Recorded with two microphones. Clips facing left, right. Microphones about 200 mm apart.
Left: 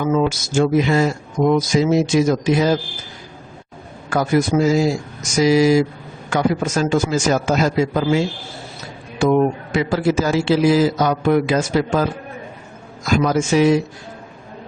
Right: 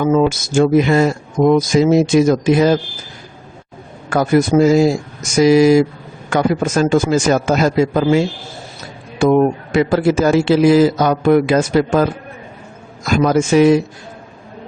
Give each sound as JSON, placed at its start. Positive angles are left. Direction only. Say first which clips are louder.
{"t": 0.1, "sound": "speech", "louder": "right 4 dB", "side_deg": -50}
{"t": 4.1, "sound": "a man's voice", "louder": "right 4 dB", "side_deg": -50}
{"t": 13.1, "sound": "a man's voice", "louder": "right 3 dB", "side_deg": -55}